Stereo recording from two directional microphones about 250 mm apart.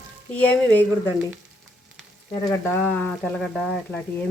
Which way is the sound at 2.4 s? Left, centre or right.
Centre.